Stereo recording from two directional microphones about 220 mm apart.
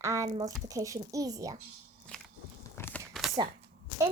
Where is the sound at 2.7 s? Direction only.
10° left (ahead or behind).